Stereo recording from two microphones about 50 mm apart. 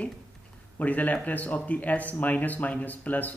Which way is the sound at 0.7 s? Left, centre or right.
Left.